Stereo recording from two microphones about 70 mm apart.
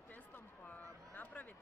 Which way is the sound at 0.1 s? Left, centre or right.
Left.